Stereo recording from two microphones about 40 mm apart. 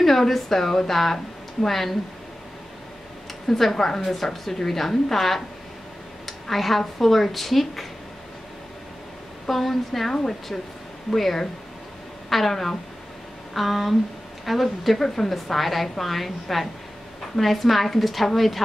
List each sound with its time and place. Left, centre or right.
0.0 s a woman's voice: centre
3.4 s a woman's voice: centre
9.5 s a woman's voice: centre